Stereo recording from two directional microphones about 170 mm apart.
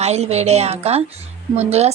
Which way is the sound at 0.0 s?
40° right (ahead or behind).